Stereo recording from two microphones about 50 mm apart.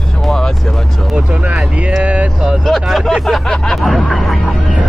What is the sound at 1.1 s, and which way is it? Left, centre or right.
Speech, right.